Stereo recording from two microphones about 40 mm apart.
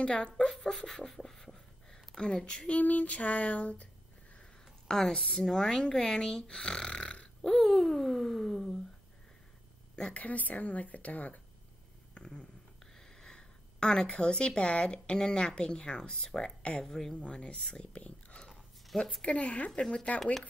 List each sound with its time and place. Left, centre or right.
0.0 s speech: left
0.5 s speech: centre; by 2.6 s left
2.6 s child singing: left
4.8 s a woman's voice: centre; by 7.2 s left
7.4 s a sound: centre
10.1 s child singing: left
12.1 s a sound: left
13.2 s a woman's voice: centre
17.1 s speech: left
19.2 s child singing: left
19.7 s speech: left